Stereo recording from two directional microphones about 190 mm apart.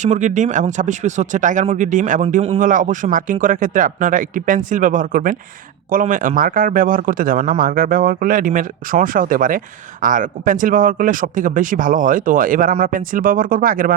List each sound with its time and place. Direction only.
0.0 s speech: 40° right (ahead or behind)
2.6 s speech: 45° right (ahead or behind)